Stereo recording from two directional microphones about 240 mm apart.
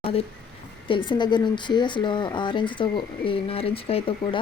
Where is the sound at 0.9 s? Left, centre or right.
Centre.